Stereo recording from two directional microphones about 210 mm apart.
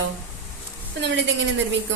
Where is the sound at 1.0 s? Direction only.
60° right (ahead or behind).